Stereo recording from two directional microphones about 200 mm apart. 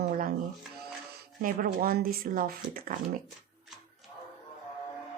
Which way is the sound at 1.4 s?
45° right (ahead or behind).